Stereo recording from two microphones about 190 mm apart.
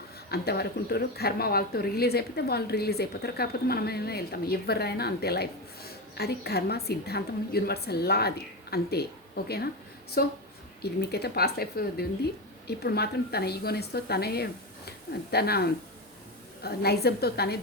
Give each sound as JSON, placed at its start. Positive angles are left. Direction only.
{"t": 0.3, "sound": "a woman's voice", "side_deg": 55}